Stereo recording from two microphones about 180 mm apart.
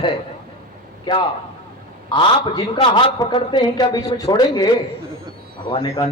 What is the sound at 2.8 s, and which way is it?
A man's voice, 25° left (ahead or behind).